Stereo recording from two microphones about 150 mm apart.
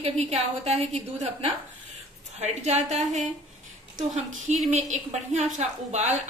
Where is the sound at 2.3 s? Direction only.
50° right (ahead or behind).